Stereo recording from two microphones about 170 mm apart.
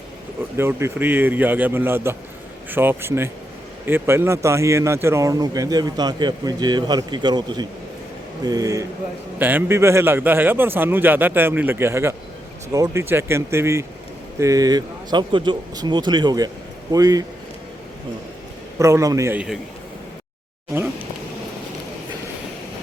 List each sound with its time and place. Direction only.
0.5 s a man's voice: 15° right (ahead or behind)
18.8 s a man's voice: 15° right (ahead or behind)